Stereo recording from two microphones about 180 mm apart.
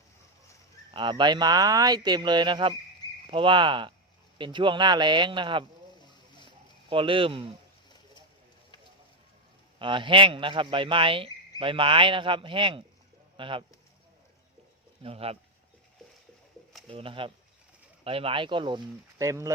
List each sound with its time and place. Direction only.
0.9 s speech: 25° right (ahead or behind)
6.9 s speech: 30° right (ahead or behind)
9.7 s speech: 30° right (ahead or behind)
15.0 s speech: 35° right (ahead or behind)
16.9 s speech: 30° right (ahead or behind)